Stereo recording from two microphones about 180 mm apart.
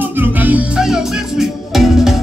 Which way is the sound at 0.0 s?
10° right (ahead or behind).